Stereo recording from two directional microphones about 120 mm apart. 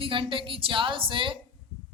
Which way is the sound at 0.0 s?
45° right (ahead or behind).